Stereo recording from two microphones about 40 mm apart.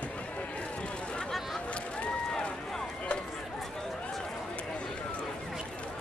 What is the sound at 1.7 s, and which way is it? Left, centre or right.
Boat, left.